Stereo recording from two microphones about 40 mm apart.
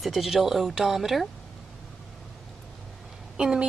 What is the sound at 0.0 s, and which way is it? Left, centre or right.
Speech, centre.